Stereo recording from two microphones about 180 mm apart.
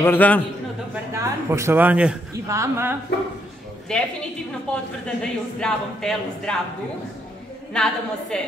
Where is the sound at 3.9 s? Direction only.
5° left (ahead or behind).